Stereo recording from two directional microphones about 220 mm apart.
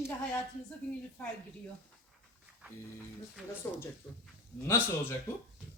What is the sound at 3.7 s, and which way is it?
A man's voice, 10° left (ahead or behind).